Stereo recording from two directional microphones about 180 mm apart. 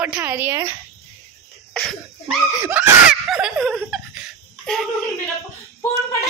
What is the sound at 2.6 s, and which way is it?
Laughter, 5° right (ahead or behind).